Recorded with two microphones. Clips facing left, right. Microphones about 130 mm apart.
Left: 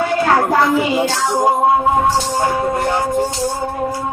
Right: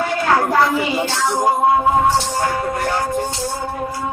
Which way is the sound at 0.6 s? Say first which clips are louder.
Left 3 dB; 15° left (ahead or behind).